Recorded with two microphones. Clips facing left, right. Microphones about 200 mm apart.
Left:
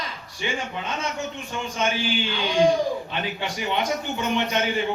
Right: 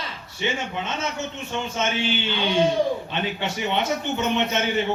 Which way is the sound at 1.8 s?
25° right (ahead or behind).